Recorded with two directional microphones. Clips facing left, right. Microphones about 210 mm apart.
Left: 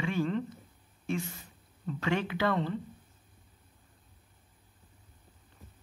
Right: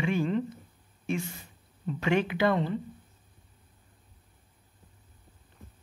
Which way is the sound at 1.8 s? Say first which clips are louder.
Right 4 dB; 15° right (ahead or behind).